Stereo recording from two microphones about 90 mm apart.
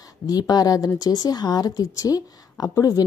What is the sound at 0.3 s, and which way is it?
Speech, 45° left (ahead or behind).